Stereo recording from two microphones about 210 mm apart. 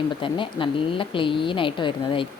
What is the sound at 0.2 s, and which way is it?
A woman's voice, 25° left (ahead or behind).